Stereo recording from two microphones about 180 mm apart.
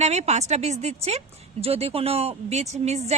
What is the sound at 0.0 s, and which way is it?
A woman's voice, 40° right (ahead or behind).